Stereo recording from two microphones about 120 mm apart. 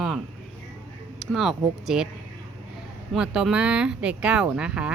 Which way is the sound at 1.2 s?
Centre (ahead or behind).